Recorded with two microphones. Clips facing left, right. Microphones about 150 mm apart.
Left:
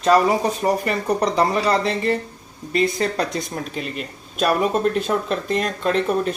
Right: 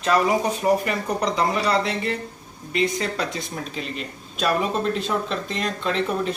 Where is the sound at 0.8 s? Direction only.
35° left (ahead or behind).